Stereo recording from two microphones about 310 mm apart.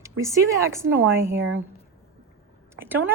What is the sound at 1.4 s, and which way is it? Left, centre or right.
Speech, right.